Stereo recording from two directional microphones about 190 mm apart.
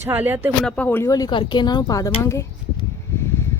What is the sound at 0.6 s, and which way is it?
Speech, 10° left (ahead or behind).